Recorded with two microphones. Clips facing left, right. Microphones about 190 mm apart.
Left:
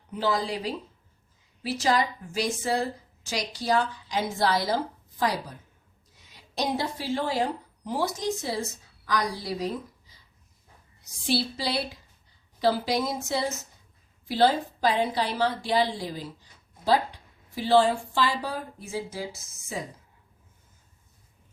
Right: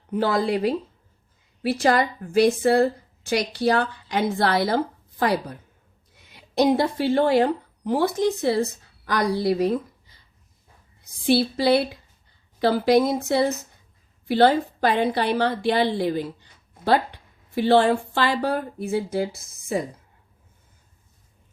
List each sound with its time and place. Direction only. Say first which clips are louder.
0.1 s a woman's voice: right 6 dB; 55° right (ahead or behind)